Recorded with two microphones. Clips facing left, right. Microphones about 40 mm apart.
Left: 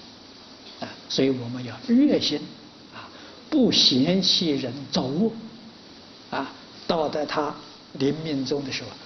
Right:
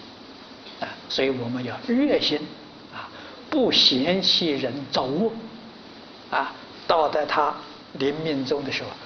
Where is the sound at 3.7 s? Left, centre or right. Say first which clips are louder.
Even; right.